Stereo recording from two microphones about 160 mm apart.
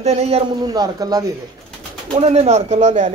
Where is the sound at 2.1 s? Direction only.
45° right (ahead or behind).